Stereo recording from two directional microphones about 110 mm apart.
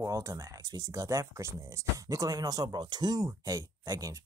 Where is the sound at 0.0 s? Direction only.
30° right (ahead or behind).